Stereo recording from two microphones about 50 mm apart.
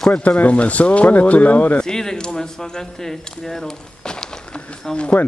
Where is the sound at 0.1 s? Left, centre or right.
Left.